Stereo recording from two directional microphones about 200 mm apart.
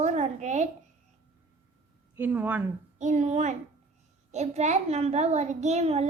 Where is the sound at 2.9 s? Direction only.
35° right (ahead or behind).